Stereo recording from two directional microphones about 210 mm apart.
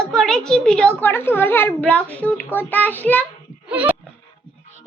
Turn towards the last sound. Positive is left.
turn(degrees=-5)  # may be behind; listen again after turning